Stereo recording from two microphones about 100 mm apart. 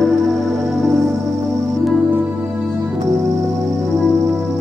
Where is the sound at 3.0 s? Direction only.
30° right (ahead or behind).